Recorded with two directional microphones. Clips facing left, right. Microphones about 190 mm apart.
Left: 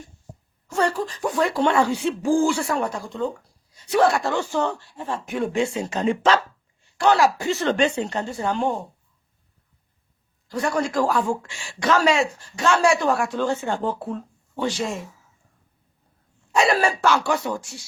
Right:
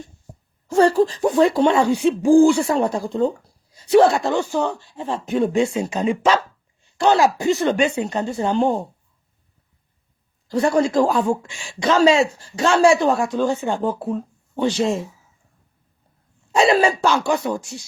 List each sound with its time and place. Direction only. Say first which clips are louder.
0.7 s speech: right 8 dB; 30° right (ahead or behind); by 6.4 s 10° right (ahead or behind)
6.9 s speech: right 2 dB; 25° right (ahead or behind)
10.5 s speech: right 6 dB; 25° right (ahead or behind)
16.6 s speech: right 4 dB; 25° right (ahead or behind)